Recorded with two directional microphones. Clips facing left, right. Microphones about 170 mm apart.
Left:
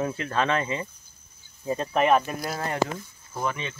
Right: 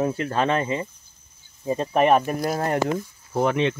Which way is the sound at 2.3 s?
45° right (ahead or behind).